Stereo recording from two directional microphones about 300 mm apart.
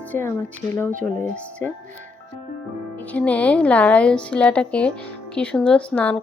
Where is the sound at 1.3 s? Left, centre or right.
Centre.